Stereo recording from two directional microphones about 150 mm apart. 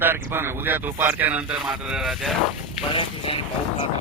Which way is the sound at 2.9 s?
40° left (ahead or behind).